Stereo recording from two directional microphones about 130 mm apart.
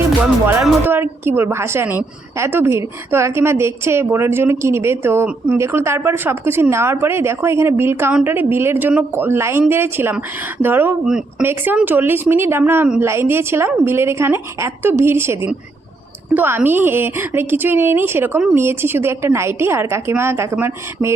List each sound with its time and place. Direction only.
0.9 s a woman's voice: 15° right (ahead or behind)